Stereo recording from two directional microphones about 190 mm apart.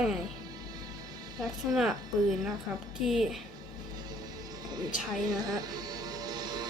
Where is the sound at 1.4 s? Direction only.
Centre (ahead or behind).